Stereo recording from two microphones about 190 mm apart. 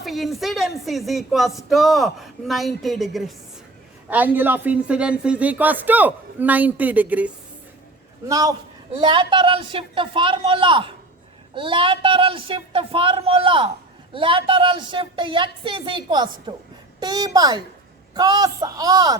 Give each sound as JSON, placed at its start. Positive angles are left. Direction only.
{"t": 0.0, "sound": "speech", "side_deg": 0}
{"t": 8.3, "sound": "a woman's voice", "side_deg": -20}